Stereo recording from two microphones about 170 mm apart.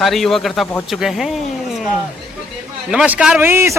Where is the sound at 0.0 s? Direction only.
Centre (ahead or behind).